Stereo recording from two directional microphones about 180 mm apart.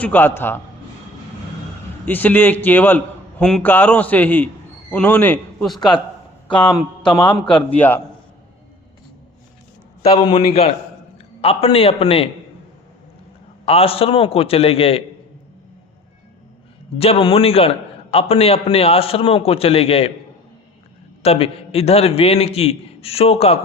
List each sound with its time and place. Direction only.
0.0 s a man's voice: 10° left (ahead or behind)
2.0 s a man's voice: 10° left (ahead or behind)
7.3 s a man's voice: 5° left (ahead or behind)
10.1 s a man's voice: 30° left (ahead or behind)
13.7 s a man's voice: 30° left (ahead or behind)
17.0 s a man's voice: 30° left (ahead or behind)
21.2 s a man's voice: 35° left (ahead or behind)